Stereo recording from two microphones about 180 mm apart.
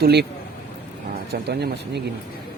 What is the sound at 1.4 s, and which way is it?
Speech, 65° right (ahead or behind).